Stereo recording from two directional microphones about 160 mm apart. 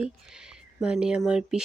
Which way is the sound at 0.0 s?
5° right (ahead or behind).